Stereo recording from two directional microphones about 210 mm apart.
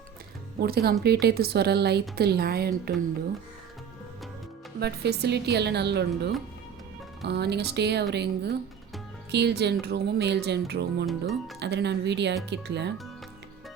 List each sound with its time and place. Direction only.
0.6 s speech: 50° right (ahead or behind)
4.8 s speech: 50° right (ahead or behind)
11.0 s speech: centre (ahead or behind)
11.6 s speech: 55° right (ahead or behind)